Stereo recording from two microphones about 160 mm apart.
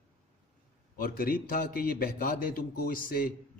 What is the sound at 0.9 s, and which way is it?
A man's voice, 65° left (ahead or behind).